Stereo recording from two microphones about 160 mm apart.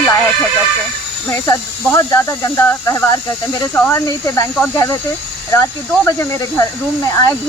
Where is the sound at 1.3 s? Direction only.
15° left (ahead or behind).